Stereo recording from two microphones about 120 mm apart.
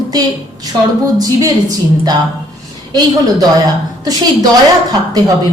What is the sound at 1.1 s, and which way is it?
Speech, 30° right (ahead or behind).